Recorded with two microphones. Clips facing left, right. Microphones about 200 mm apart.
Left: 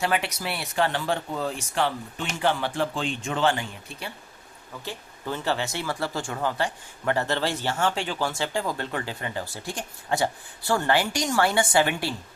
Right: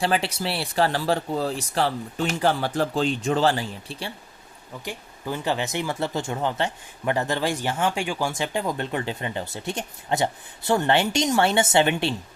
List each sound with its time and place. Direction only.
0.0 s speech: 30° right (ahead or behind)
4.9 s speech: 15° right (ahead or behind)